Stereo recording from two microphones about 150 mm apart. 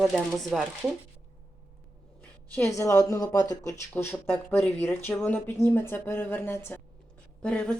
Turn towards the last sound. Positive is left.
turn(degrees=5)  # may be behind; listen again after turning